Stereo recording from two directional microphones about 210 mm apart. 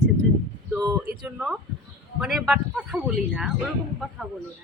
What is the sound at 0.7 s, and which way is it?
Speech, 15° right (ahead or behind).